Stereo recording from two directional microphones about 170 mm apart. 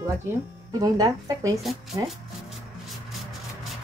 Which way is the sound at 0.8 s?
20° right (ahead or behind).